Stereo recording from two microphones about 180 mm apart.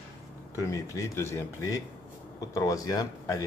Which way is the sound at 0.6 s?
15° left (ahead or behind).